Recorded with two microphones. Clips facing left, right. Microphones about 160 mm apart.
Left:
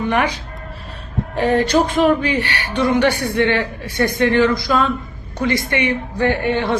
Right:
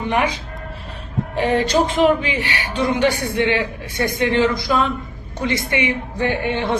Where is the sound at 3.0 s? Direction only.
15° right (ahead or behind).